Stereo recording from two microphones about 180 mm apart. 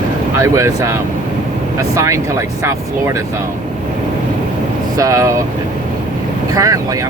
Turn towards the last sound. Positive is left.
turn(degrees=-20)  # may be behind; listen again after turning